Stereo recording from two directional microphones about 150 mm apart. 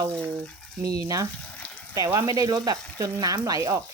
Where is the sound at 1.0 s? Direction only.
20° right (ahead or behind).